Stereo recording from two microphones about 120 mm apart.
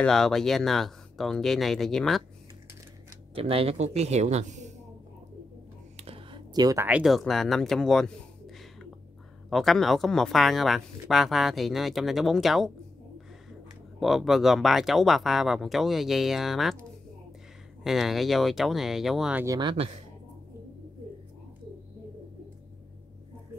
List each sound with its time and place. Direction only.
0.0 s speech: 5° left (ahead or behind)
3.3 s speech: 50° right (ahead or behind); by 4.6 s 75° right (ahead or behind)
5.9 s a sound: 50° right (ahead or behind)
6.5 s speech: 30° right (ahead or behind)
7.0 s speech: centre (ahead or behind)
13.9 s speech: centre (ahead or behind)
17.8 s speech: centre (ahead or behind)
19.6 s speech: 40° right (ahead or behind)